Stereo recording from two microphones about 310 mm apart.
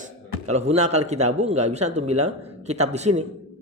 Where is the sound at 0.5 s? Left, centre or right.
Right.